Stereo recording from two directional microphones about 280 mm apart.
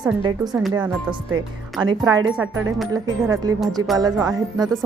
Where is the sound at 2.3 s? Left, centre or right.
Centre.